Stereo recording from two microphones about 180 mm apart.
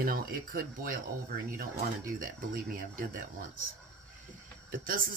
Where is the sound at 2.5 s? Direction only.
50° right (ahead or behind).